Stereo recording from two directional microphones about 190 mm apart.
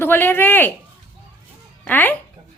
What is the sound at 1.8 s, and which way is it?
Speech, 10° left (ahead or behind).